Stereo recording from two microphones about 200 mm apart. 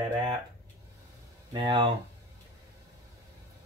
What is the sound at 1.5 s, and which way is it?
Speech, 25° right (ahead or behind).